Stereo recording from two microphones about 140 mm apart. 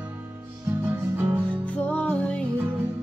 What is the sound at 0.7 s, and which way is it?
Music, 10° right (ahead or behind).